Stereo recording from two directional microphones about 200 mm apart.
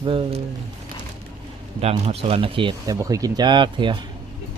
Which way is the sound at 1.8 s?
30° right (ahead or behind).